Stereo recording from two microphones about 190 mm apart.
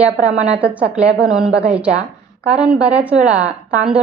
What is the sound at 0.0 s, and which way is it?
A woman's voice, 5° right (ahead or behind).